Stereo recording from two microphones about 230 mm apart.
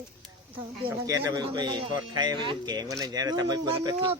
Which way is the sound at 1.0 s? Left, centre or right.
Centre.